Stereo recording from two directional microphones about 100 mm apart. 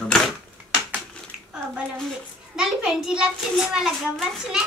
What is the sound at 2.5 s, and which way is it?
A child's voice, 5° right (ahead or behind).